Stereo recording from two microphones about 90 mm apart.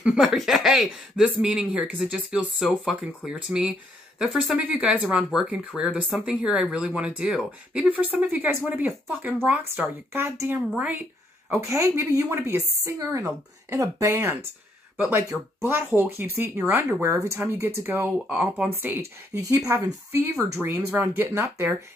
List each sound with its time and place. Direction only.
0.0 s speech: 5° right (ahead or behind)
4.6 s speech: 15° right (ahead or behind)
11.6 s a woman's voice: 30° right (ahead or behind)
19.4 s a woman's voice: 40° right (ahead or behind)
20.2 s speech: 30° right (ahead or behind)
21.3 s a woman's voice: 35° right (ahead or behind)